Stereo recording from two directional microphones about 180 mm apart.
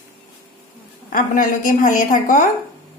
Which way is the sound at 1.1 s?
50° left (ahead or behind).